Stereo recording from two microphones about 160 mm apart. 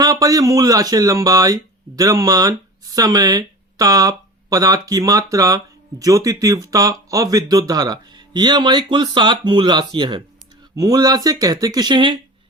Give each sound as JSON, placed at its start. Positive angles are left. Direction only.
{"t": 0.0, "sound": "speech", "side_deg": -25}